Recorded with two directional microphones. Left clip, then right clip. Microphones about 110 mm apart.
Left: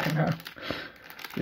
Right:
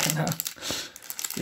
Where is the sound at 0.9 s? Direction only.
25° right (ahead or behind).